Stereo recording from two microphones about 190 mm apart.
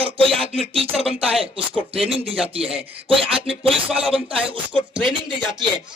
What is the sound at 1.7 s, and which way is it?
Speech, 30° right (ahead or behind).